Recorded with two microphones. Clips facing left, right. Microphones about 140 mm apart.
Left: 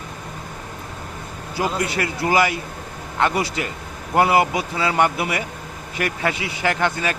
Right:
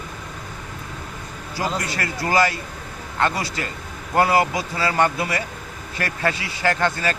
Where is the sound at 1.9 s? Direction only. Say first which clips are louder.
Left 3 dB; 20° left (ahead or behind).